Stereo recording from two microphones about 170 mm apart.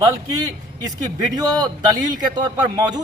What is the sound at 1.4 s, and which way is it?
A man's voice, 25° right (ahead or behind).